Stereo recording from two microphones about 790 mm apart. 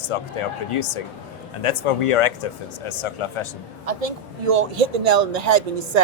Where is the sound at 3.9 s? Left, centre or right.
Right.